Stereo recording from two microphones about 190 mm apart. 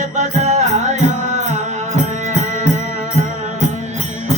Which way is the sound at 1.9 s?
40° right (ahead or behind).